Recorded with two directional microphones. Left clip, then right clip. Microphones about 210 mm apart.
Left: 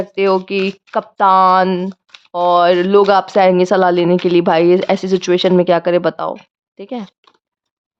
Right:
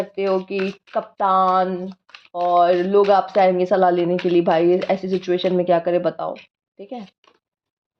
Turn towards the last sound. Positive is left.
turn(degrees=30)  # may be behind; listen again after turning